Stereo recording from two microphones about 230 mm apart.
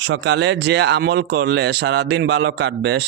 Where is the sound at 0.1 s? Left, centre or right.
Right.